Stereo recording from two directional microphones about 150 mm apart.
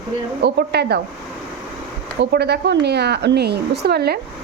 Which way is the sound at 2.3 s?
90° right.